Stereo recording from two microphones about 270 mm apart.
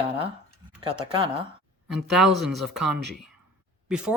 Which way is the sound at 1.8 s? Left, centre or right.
Centre.